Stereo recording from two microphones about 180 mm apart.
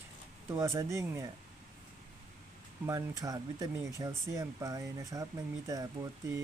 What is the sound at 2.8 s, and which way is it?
Speech, 15° right (ahead or behind).